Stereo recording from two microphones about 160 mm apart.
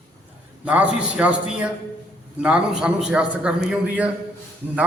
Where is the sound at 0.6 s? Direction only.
5° right (ahead or behind).